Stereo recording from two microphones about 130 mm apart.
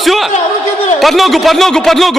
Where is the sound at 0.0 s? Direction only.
Centre (ahead or behind).